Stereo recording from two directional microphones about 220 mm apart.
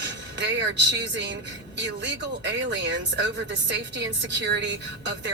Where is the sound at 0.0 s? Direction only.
50° right (ahead or behind).